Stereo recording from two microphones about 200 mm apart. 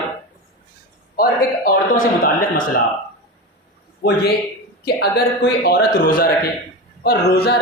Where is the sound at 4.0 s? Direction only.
50° left (ahead or behind).